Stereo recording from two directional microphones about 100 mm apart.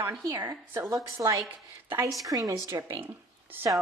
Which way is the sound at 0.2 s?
30° right (ahead or behind).